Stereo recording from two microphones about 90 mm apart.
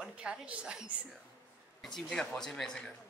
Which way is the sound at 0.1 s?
10° right (ahead or behind).